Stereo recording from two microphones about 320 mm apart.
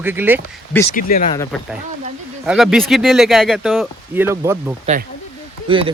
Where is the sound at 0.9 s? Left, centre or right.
Left.